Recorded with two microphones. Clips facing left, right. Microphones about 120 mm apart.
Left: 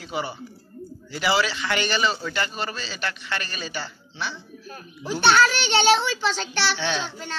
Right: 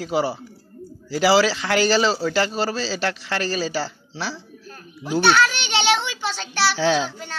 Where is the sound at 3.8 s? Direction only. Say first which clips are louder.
Right 4 dB; 35° right (ahead or behind).